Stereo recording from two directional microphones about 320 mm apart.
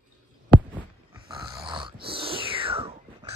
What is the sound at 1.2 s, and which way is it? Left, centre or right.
Dog, centre.